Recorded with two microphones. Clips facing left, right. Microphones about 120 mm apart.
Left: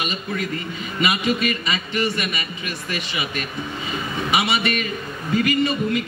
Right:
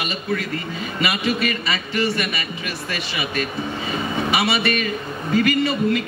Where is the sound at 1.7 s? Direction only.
20° left (ahead or behind).